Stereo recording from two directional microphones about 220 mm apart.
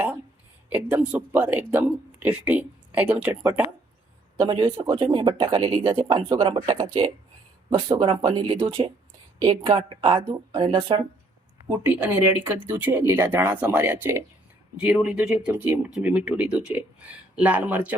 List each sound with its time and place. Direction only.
0.7 s speech: 10° right (ahead or behind)
4.4 s speech: 20° right (ahead or behind)
11.9 s speech: 10° right (ahead or behind)